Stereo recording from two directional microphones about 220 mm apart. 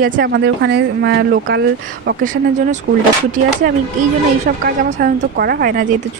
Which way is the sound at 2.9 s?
55° right (ahead or behind).